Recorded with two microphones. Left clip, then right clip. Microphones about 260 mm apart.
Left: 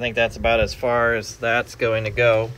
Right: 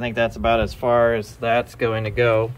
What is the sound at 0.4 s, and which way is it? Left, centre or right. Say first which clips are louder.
Speech: even; right.